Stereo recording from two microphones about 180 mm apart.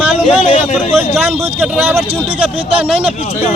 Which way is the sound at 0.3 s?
35° left (ahead or behind).